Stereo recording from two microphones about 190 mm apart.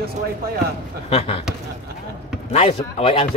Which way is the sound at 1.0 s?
30° left (ahead or behind).